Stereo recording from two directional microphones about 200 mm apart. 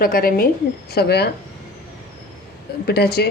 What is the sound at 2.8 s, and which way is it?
Speech, 55° left (ahead or behind).